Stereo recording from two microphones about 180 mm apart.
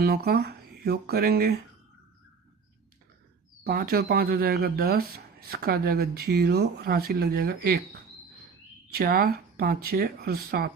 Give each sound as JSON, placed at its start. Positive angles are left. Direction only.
{"t": 0.0, "sound": "speech", "side_deg": -55}
{"t": 3.7, "sound": "speech", "side_deg": -55}
{"t": 8.9, "sound": "speech", "side_deg": -55}